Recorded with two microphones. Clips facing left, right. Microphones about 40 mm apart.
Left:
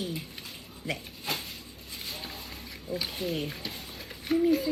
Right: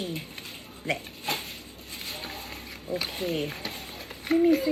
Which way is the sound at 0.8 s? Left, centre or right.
Right.